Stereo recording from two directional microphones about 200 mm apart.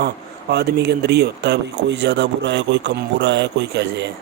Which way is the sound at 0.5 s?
55° right (ahead or behind).